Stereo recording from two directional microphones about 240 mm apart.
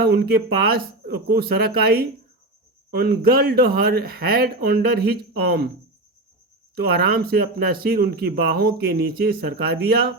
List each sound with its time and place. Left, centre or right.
0.0 s speech: right
6.7 s speech: right